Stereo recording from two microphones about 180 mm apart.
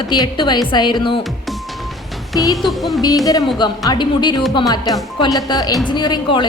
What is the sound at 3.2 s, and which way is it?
A woman's voice, 20° left (ahead or behind).